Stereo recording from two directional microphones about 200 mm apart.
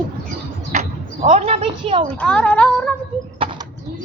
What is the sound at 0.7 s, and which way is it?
Speech, 35° right (ahead or behind).